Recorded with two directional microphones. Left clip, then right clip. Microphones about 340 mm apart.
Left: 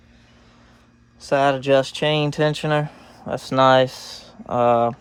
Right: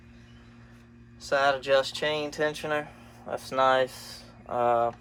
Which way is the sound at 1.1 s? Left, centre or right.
Centre.